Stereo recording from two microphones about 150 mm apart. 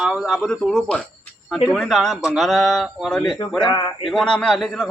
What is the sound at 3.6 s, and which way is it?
Speech, 25° left (ahead or behind).